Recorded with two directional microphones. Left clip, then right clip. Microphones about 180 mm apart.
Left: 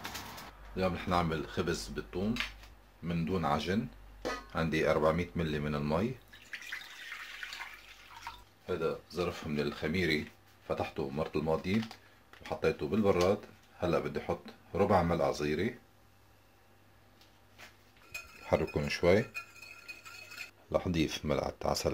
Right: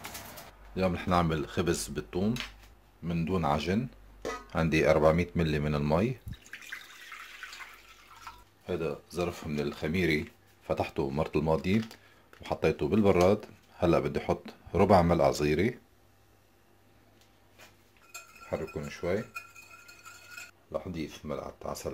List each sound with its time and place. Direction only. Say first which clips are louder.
0.7 s speech: right 3 dB; 40° right (ahead or behind)
3.1 s speech: right 3 dB; 30° right (ahead or behind)
8.6 s speech: right 1 dB; 45° right (ahead or behind)
9.2 s speech: right 2 dB; 25° right (ahead or behind)
10.7 s speech: right 4 dB; 45° right (ahead or behind)
18.5 s speech: left 5 dB; 35° left (ahead or behind)
20.7 s speech: left 5 dB; 45° left (ahead or behind)